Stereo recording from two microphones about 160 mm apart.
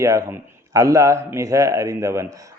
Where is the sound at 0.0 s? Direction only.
20° right (ahead or behind).